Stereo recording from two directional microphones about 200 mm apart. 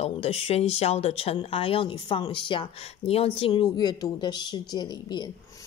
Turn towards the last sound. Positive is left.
turn(degrees=20)  # may be behind; listen again after turning